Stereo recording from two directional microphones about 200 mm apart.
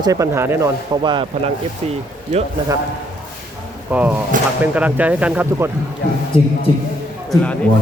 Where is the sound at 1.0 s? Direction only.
25° right (ahead or behind).